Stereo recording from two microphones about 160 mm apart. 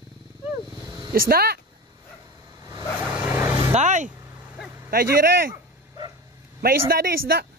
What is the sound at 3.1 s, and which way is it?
Vehicle, 15° right (ahead or behind).